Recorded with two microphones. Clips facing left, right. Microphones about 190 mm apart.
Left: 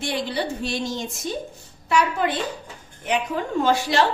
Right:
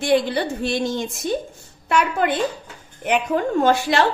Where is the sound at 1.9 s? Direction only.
55° right (ahead or behind).